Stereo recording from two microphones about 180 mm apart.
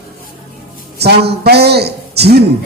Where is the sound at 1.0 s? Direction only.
65° right (ahead or behind).